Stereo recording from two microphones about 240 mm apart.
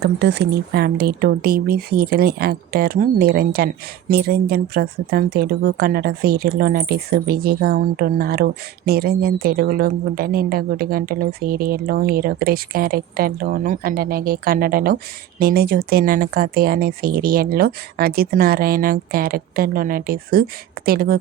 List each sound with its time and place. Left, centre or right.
0.0 s speech: right